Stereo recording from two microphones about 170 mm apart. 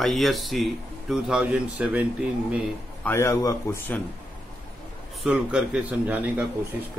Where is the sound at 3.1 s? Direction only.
15° left (ahead or behind).